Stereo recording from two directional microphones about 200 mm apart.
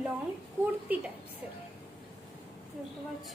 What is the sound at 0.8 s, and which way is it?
Speech, 5° right (ahead or behind).